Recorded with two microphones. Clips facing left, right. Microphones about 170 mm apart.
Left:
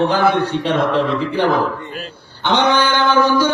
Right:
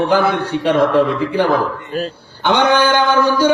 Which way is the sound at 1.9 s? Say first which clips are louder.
Right 9 dB; 40° right (ahead or behind).